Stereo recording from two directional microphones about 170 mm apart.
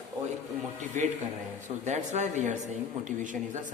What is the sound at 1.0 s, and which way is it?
A man's voice, 45° right (ahead or behind).